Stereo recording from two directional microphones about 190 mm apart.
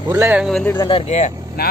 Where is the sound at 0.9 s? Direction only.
30° left (ahead or behind).